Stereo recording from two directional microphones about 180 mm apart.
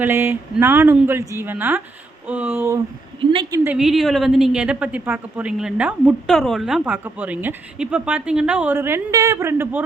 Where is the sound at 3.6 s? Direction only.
5° right (ahead or behind).